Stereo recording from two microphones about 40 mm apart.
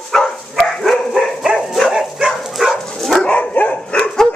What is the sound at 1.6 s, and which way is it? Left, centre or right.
Dog, centre.